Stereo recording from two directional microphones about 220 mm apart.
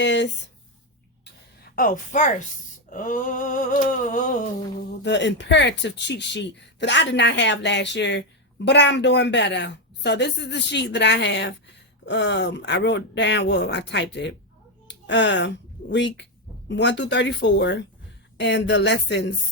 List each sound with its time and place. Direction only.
0.0 s speech: 55° left (ahead or behind)
1.7 s a sound: 40° left (ahead or behind)
5.0 s speech: 55° left (ahead or behind)